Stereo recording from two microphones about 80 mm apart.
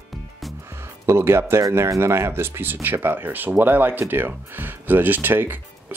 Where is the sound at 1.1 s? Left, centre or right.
Right.